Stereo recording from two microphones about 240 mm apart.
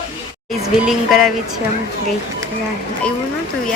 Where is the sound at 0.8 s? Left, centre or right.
Centre.